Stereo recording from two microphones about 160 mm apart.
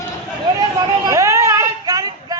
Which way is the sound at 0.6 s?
20° right (ahead or behind).